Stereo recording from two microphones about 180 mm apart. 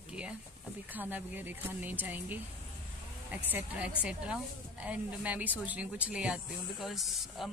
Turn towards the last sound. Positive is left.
turn(degrees=0)  # may be behind; listen again after turning